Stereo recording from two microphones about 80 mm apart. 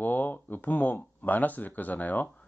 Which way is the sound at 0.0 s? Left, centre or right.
Left.